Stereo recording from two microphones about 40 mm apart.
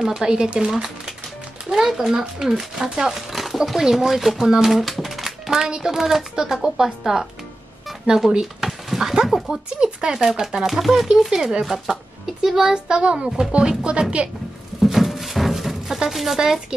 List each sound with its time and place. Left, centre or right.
0.0 s speech: centre
2.4 s a child's voice: centre
3.1 s speech: centre
8.3 s speech: centre
8.6 s a sound: centre
9.8 s a child's voice: centre
14.8 s music: centre
16.1 s speech: centre